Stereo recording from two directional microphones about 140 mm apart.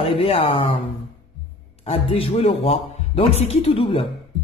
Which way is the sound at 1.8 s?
45° left (ahead or behind).